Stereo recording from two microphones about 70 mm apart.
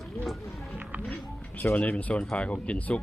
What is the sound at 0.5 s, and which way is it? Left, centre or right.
Music, centre.